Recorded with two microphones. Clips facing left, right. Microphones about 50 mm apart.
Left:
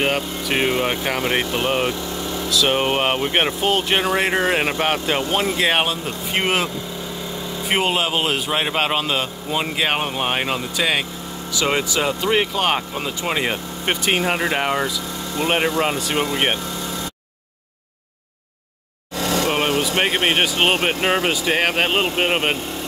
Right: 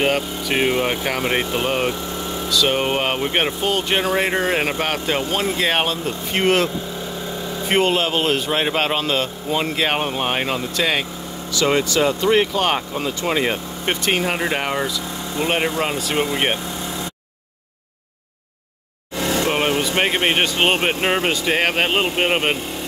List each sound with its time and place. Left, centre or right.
0.0 s a man's voice: centre
2.5 s a man's voice: centre
11.5 s a man's voice: centre
19.1 s vehicle: right
20.0 s a man's voice: centre